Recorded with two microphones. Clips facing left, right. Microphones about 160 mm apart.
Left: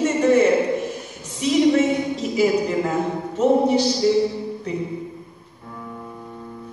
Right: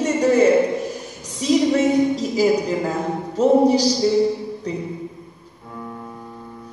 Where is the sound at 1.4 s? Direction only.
35° right (ahead or behind).